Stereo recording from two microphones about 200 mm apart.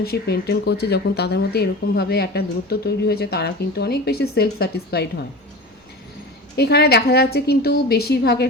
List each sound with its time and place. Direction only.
0.0 s speech: 50° left (ahead or behind)
6.6 s speech: 55° left (ahead or behind)